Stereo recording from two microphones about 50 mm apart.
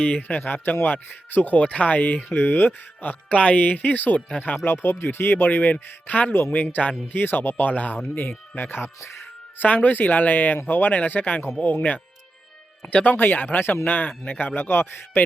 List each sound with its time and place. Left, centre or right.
0.2 s speech: left
3.3 s speech: left
3.6 s speech: left
4.6 s speech: left
5.7 s speech: left
9.6 s speech: left
12.9 s speech: left
13.1 s speech: left